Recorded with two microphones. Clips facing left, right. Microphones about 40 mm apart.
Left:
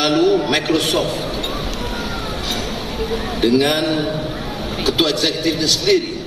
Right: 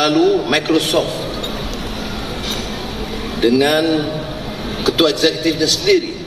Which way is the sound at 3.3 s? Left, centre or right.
Right.